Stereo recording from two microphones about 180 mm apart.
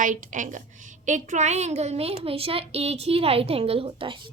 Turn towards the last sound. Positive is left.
turn(degrees=-30)  # may be behind; listen again after turning